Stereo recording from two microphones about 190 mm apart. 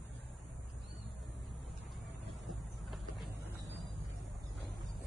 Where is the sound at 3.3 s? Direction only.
60° right (ahead or behind).